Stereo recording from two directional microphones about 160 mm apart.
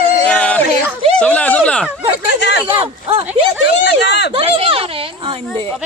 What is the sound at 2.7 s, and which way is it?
Speech, 35° right (ahead or behind).